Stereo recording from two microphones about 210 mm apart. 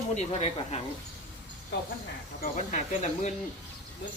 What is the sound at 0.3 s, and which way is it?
Speech, 30° left (ahead or behind).